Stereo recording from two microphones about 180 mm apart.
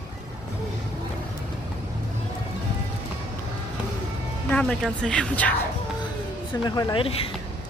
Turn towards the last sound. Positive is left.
turn(degrees=30)  # may be behind; listen again after turning